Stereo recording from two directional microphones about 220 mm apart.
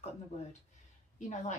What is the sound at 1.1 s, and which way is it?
Speech, 35° left (ahead or behind).